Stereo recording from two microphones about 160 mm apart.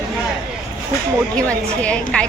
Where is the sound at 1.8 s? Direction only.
5° left (ahead or behind).